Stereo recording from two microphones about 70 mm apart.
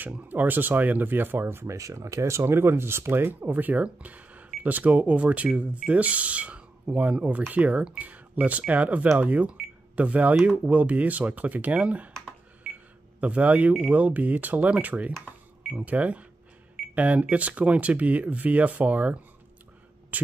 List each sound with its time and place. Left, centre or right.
0.0 s speech: right
1.8 s speech: right; by 12.1 s centre
13.2 s speech: centre
15.6 s cash register: centre
15.9 s speech: right